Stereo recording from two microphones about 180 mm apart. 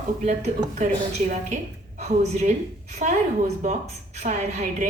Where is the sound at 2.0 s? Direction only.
40° right (ahead or behind).